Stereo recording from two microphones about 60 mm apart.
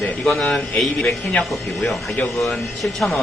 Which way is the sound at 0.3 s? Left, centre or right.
Centre.